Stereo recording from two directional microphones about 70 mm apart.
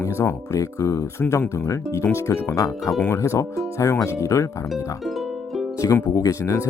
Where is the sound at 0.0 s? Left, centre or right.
Left.